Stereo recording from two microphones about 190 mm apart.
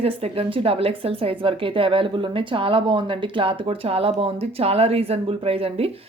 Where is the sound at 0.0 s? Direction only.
30° right (ahead or behind).